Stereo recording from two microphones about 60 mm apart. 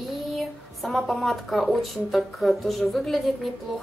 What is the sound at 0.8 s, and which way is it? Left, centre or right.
A woman's voice, centre.